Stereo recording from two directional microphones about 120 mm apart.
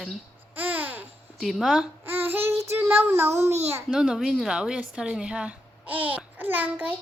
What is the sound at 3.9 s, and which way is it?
Speech, 5° right (ahead or behind).